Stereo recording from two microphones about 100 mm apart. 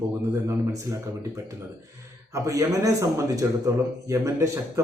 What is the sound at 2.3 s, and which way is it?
Speech, 35° right (ahead or behind).